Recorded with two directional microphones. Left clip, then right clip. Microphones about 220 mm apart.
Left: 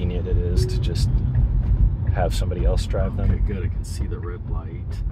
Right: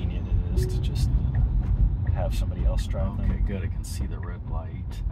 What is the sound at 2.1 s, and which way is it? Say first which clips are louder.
Speech: left 9 dB; 50° left (ahead or behind).